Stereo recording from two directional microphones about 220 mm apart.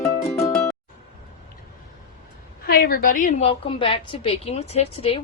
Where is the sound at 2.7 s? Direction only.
45° left (ahead or behind).